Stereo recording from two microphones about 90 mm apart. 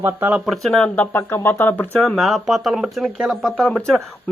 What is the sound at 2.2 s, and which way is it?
Speech, centre (ahead or behind).